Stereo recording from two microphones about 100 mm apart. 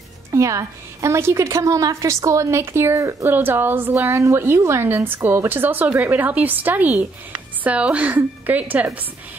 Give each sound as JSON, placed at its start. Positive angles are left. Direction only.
{"t": 0.3, "sound": "a woman's voice", "side_deg": -30}